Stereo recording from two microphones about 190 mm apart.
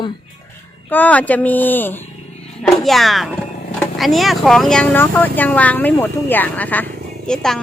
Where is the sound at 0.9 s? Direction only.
10° left (ahead or behind).